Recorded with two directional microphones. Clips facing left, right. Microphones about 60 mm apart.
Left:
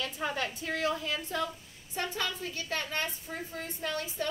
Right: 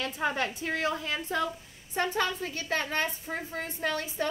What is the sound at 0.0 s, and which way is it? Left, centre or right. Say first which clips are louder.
A woman's voice: right 4 dB; right.